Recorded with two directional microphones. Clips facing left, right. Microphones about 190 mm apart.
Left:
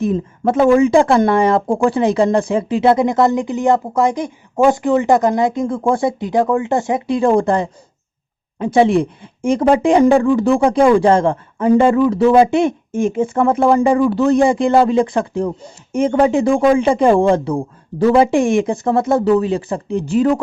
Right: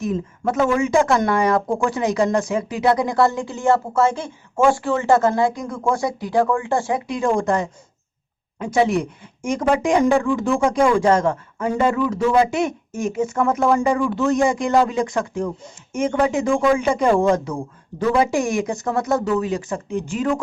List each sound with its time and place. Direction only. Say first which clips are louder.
0.0 s speech: left 6 dB; 30° left (ahead or behind)
7.2 s speech: left 5 dB; 35° left (ahead or behind)